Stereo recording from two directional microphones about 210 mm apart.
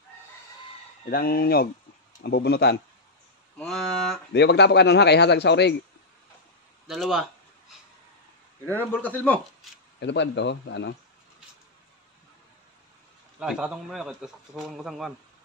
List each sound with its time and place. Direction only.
1.1 s speech: 45° left (ahead or behind)
3.5 s a man's voice: centre (ahead or behind)
4.3 s speech: 55° left (ahead or behind)
6.9 s a man's voice: centre (ahead or behind)
8.6 s a man's voice: 10° left (ahead or behind)
9.9 s speech: 55° left (ahead or behind)
13.4 s a man's voice: 5° right (ahead or behind)